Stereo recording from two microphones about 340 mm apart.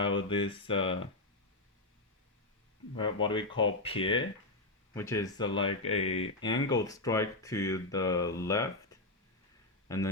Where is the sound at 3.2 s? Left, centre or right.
Centre.